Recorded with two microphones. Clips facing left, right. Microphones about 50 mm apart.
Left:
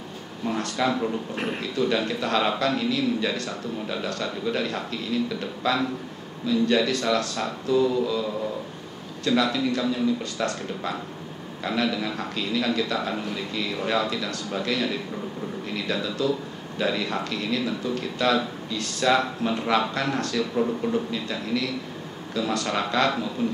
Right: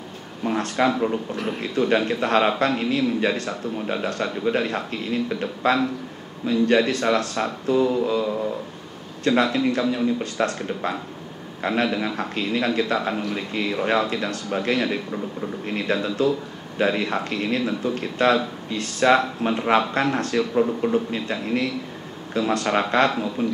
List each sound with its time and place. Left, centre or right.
0.6 s a man's voice: right